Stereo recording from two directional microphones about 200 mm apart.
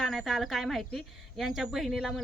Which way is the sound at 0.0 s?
Centre (ahead or behind).